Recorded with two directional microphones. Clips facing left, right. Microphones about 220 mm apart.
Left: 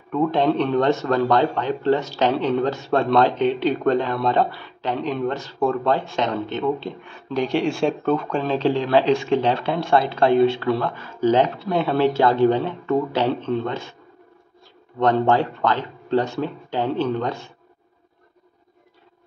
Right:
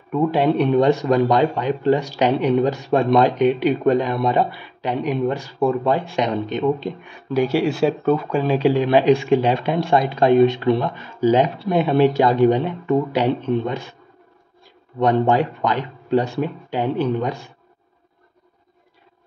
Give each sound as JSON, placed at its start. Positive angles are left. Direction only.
{"t": 0.1, "sound": "speech", "side_deg": -10}
{"t": 15.0, "sound": "speech", "side_deg": -15}